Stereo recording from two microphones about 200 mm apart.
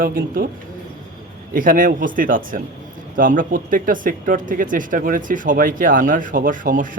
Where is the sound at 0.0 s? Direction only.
45° right (ahead or behind).